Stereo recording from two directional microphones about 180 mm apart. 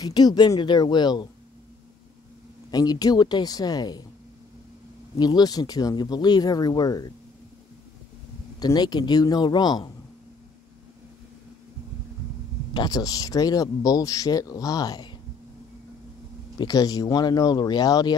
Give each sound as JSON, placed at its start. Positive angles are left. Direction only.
{"t": 0.0, "sound": "a man's voice", "side_deg": 20}
{"t": 2.7, "sound": "a man's voice", "side_deg": 20}
{"t": 5.2, "sound": "a man's voice", "side_deg": 20}
{"t": 8.5, "sound": "a man's voice", "side_deg": 20}
{"t": 12.7, "sound": "a man's voice", "side_deg": 20}
{"t": 16.5, "sound": "a man's voice", "side_deg": 20}